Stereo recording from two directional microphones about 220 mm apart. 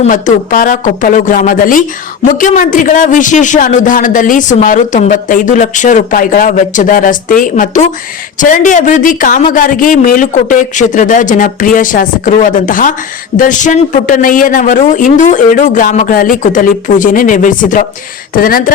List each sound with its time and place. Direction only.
0.0 s a man's voice: 35° left (ahead or behind)